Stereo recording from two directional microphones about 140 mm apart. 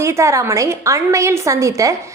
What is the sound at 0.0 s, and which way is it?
A woman's voice, 20° right (ahead or behind).